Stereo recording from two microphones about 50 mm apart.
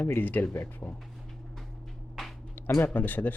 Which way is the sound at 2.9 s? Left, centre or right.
Left.